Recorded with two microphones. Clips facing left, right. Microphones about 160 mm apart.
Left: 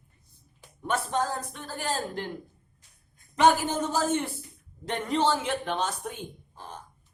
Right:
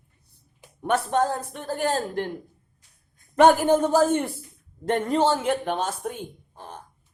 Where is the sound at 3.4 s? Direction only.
55° right (ahead or behind).